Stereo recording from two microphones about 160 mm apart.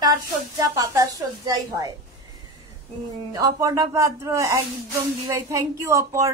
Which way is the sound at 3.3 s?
20° right (ahead or behind).